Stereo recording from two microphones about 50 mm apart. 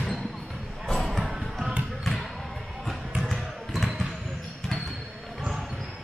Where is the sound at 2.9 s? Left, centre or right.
Centre.